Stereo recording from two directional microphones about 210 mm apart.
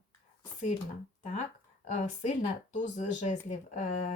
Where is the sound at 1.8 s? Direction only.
35° left (ahead or behind).